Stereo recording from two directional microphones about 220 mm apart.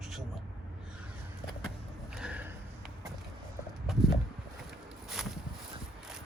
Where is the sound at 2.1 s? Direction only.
5° right (ahead or behind).